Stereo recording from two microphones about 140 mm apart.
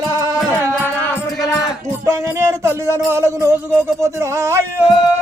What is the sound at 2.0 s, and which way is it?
Music, 20° right (ahead or behind).